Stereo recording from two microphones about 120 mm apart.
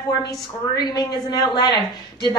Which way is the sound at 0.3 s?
35° left (ahead or behind).